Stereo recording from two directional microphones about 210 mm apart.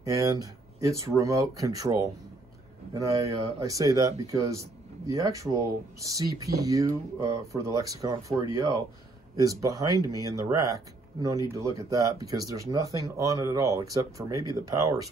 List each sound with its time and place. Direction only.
0.0 s speech: 15° right (ahead or behind)